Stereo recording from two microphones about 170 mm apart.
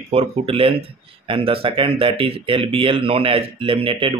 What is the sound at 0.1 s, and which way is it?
Speech, 35° right (ahead or behind).